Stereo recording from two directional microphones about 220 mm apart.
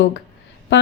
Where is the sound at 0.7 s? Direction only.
55° left (ahead or behind).